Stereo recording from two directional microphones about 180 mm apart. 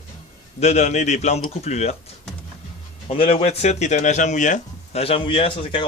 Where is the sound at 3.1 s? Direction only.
35° left (ahead or behind).